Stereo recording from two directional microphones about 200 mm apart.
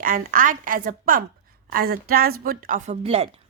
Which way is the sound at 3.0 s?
30° right (ahead or behind).